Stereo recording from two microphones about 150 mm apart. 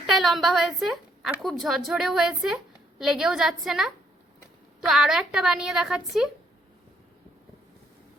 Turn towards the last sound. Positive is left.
turn(degrees=-5)  # may be behind; listen again after turning